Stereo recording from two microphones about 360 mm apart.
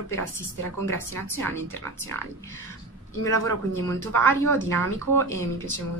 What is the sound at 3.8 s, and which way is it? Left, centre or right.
A woman's voice, centre.